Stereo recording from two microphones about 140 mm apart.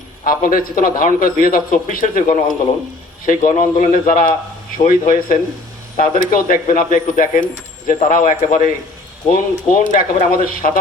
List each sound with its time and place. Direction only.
0.3 s a man's voice: 85° left
2.2 s speech: 60° left (ahead or behind); by 7.4 s 80° left
8.1 s speech: 65° left (ahead or behind)